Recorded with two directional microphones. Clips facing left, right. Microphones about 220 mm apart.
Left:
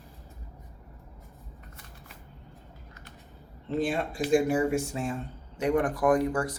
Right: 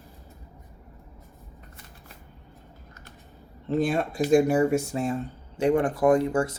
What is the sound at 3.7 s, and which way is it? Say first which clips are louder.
Speech: right 4 dB; 40° right (ahead or behind).